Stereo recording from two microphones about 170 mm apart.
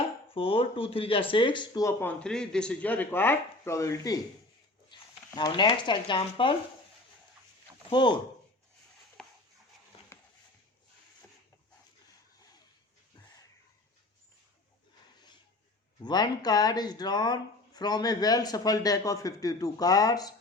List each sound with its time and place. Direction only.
0.3 s speech: 35° left (ahead or behind)
4.9 s a sound: 25° left (ahead or behind)
5.4 s speech: 25° left (ahead or behind)
7.9 s speech: 30° left (ahead or behind)
16.0 s speech: 25° left (ahead or behind)